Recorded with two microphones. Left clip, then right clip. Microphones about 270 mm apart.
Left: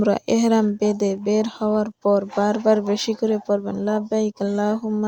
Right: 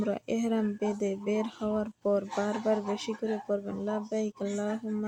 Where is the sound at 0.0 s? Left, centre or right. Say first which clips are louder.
Left 12 dB; left.